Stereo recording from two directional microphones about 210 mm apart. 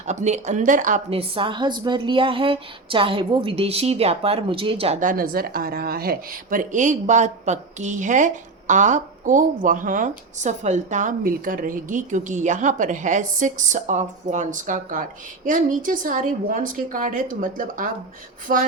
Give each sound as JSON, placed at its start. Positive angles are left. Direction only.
{"t": 0.0, "sound": "a woman's voice", "side_deg": -35}